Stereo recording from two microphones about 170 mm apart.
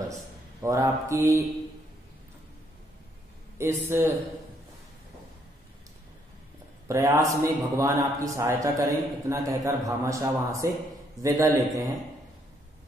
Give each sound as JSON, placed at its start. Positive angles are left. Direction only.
{"t": 0.6, "sound": "a man's voice", "side_deg": -15}
{"t": 3.5, "sound": "a man's voice", "side_deg": -15}
{"t": 6.9, "sound": "a man's voice", "side_deg": -20}